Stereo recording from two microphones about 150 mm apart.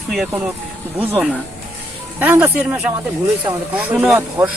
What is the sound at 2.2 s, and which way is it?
Speech, 10° right (ahead or behind).